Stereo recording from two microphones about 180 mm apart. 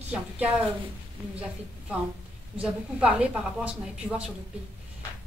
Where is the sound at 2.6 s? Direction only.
5° right (ahead or behind).